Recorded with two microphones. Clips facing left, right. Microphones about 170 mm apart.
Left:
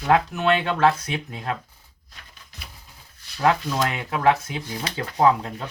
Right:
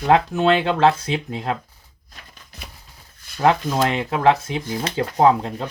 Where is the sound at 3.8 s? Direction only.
25° right (ahead or behind).